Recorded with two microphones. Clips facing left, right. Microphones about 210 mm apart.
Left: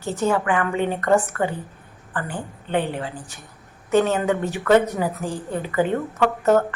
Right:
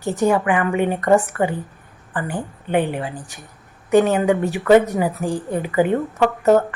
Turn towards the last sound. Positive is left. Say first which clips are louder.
# right 3 dB
turn(degrees=-15)  # may be behind; listen again after turning